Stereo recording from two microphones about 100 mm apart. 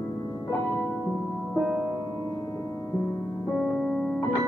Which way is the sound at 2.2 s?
30° left (ahead or behind).